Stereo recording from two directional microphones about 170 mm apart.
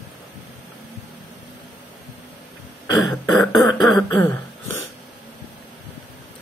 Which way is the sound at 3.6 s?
20° left (ahead or behind).